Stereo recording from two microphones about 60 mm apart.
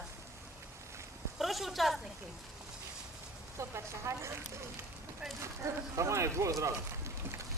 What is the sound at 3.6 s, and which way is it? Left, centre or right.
Speech, right.